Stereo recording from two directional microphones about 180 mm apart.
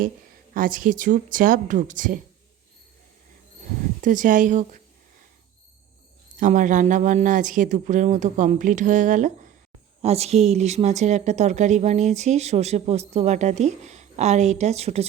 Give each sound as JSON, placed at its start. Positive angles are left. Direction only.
{"t": 0.5, "sound": "speech", "side_deg": -50}
{"t": 4.0, "sound": "speech", "side_deg": -45}
{"t": 6.4, "sound": "speech", "side_deg": -45}